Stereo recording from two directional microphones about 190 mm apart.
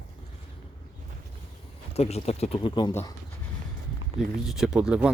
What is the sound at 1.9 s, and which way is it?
Speech, 35° left (ahead or behind).